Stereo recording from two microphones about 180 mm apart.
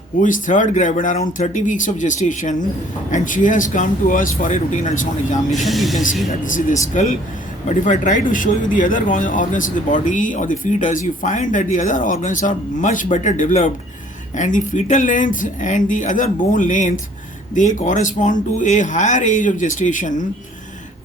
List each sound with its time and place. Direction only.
0.2 s speech: 45° left (ahead or behind)
5.6 s speech: centre (ahead or behind)
6.4 s speech: 45° left (ahead or behind)